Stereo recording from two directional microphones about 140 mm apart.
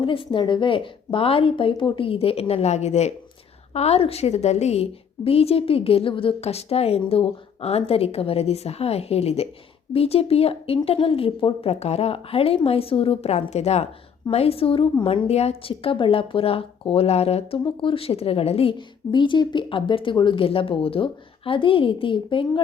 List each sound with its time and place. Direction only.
0.0 s a woman's voice: 40° left (ahead or behind)